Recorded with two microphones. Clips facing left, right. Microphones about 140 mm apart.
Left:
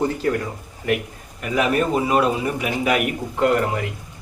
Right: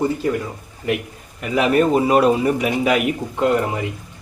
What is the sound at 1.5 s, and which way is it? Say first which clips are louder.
A man's voice: right 4 dB; 35° right (ahead or behind).